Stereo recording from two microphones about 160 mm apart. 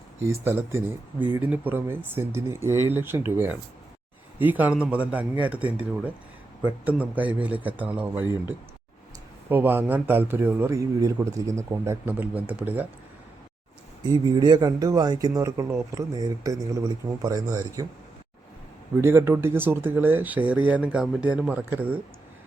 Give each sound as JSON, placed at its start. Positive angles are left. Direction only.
{"t": 0.3, "sound": "a man's voice", "side_deg": -15}
{"t": 14.0, "sound": "speech", "side_deg": -25}
{"t": 19.0, "sound": "a man's voice", "side_deg": -15}